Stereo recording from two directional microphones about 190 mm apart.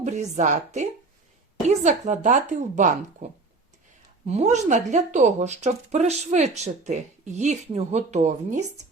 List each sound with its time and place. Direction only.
0.0 s speech: 40° right (ahead or behind)
4.3 s speech: 35° right (ahead or behind)